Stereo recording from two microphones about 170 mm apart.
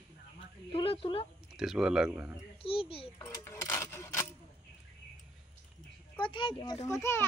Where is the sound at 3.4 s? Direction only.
15° left (ahead or behind).